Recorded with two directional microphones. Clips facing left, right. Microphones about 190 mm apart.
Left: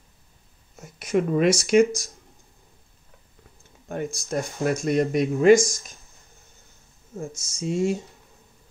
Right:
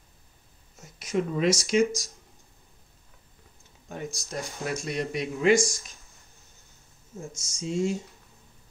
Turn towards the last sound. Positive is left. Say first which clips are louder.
# left 4 dB
turn(degrees=55)  # may be behind; listen again after turning